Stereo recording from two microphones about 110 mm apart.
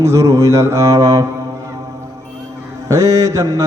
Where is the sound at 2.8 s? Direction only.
30° right (ahead or behind).